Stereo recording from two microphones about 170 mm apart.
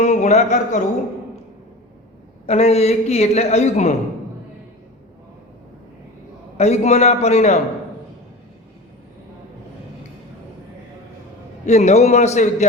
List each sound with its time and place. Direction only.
0.0 s speech: 40° left (ahead or behind)
2.5 s a man's voice: 40° left (ahead or behind)
6.6 s a man's voice: 40° left (ahead or behind)
11.6 s a man's voice: 40° left (ahead or behind)